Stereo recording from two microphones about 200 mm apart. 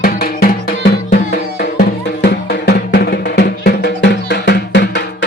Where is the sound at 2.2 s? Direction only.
60° left (ahead or behind).